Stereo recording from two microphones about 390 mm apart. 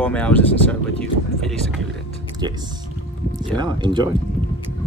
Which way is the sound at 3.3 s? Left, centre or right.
Centre.